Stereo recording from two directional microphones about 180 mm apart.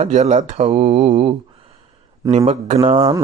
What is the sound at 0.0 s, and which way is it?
Speech, 40° right (ahead or behind).